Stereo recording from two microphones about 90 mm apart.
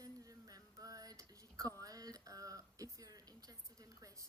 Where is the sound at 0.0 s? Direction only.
40° right (ahead or behind).